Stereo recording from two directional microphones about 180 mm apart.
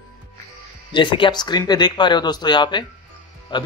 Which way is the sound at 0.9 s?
25° left (ahead or behind).